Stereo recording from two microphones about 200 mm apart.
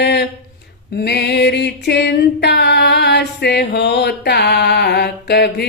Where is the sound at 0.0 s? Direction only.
55° left (ahead or behind).